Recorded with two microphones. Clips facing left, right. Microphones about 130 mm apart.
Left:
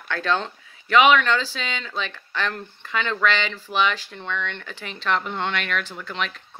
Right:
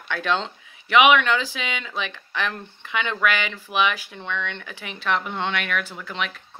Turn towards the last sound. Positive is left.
turn(degrees=-10)  # may be behind; listen again after turning